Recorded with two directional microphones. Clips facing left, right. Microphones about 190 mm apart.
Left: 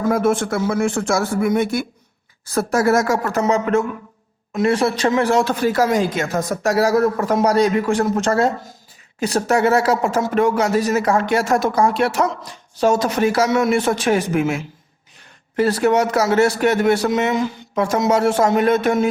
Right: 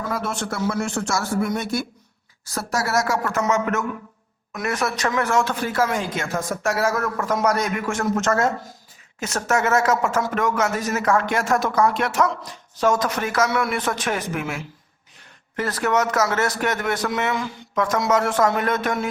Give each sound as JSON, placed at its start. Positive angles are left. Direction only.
{"t": 0.0, "sound": "speech", "side_deg": 50}
{"t": 3.3, "sound": "a man's voice", "side_deg": 30}
{"t": 15.5, "sound": "a man's voice", "side_deg": 30}